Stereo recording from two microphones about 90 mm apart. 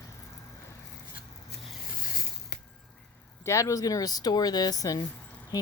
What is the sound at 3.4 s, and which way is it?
Speech, 35° left (ahead or behind).